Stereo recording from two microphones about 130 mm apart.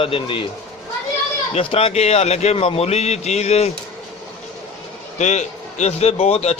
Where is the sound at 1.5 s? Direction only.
50° left (ahead or behind).